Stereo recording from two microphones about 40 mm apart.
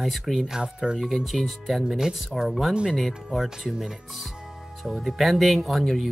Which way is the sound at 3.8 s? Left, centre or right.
Centre.